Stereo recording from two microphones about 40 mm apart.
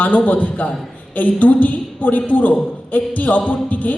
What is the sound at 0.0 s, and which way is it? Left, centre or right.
A man's voice, left.